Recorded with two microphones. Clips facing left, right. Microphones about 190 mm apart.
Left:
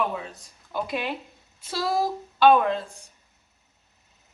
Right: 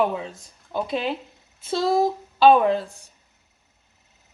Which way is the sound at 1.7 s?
25° right (ahead or behind).